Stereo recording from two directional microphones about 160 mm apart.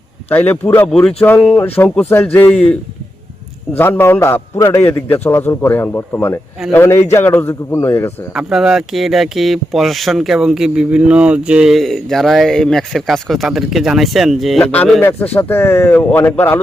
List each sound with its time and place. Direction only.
0.3 s a man's voice: 10° left (ahead or behind)
3.7 s a man's voice: 10° left (ahead or behind)
8.3 s a man's voice: 5° right (ahead or behind); by 16.6 s 15° left (ahead or behind)